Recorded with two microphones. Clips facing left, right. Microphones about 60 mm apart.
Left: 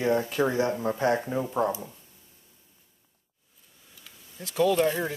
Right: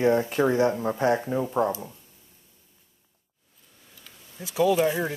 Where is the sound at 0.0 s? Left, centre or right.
Centre.